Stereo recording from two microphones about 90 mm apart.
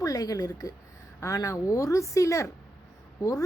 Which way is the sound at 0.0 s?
40° left (ahead or behind).